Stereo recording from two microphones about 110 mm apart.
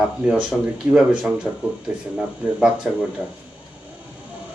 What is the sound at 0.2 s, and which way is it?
Speech, 5° right (ahead or behind).